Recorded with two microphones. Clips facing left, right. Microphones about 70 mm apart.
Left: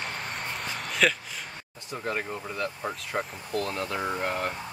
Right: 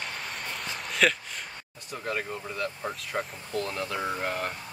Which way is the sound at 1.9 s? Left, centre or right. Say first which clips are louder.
Left 1 dB; centre.